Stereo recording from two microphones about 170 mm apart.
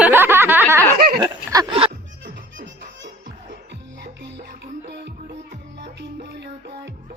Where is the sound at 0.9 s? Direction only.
60° right (ahead or behind).